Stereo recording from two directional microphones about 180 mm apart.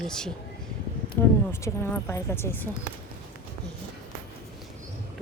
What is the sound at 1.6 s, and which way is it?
A woman's voice, 15° left (ahead or behind).